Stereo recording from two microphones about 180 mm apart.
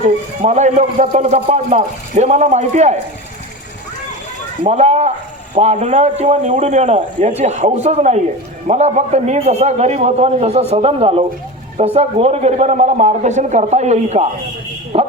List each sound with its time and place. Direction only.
0.0 s speech: 40° right (ahead or behind)
4.6 s speech: 40° right (ahead or behind)